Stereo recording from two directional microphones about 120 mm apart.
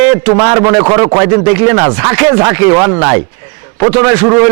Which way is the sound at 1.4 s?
20° right (ahead or behind).